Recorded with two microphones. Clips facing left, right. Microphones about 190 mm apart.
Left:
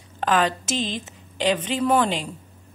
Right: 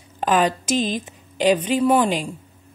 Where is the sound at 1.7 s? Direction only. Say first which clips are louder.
Right 3 dB; 10° right (ahead or behind).